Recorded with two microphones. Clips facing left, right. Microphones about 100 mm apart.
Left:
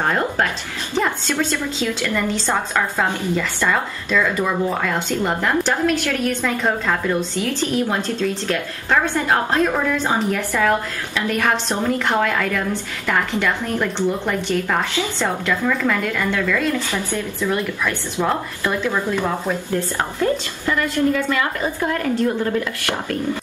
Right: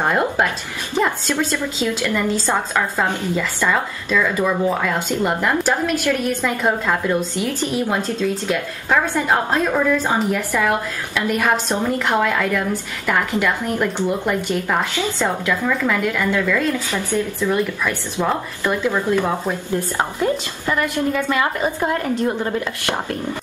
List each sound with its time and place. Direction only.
0.0 s speech: 10° right (ahead or behind)
1.3 s a woman's voice: 15° right (ahead or behind)